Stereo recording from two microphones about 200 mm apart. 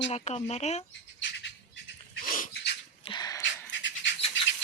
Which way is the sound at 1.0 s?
65° left (ahead or behind).